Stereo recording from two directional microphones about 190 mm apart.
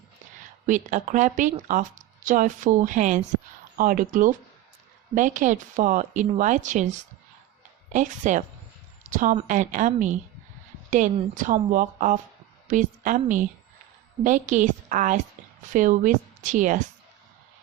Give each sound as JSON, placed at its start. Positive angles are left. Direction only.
{"t": 0.7, "sound": "speech", "side_deg": -40}
{"t": 7.9, "sound": "a woman's voice", "side_deg": -40}